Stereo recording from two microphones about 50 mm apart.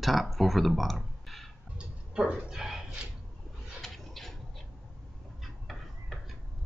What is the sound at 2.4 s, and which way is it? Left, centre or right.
Speech, centre.